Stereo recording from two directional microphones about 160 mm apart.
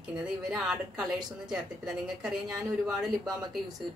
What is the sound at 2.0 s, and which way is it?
A woman's voice, centre (ahead or behind).